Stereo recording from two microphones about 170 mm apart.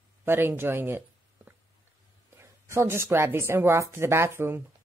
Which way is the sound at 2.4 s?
15° right (ahead or behind).